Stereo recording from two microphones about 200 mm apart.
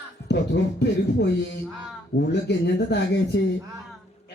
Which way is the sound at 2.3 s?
60° left (ahead or behind).